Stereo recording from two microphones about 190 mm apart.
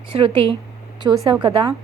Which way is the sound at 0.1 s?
25° right (ahead or behind).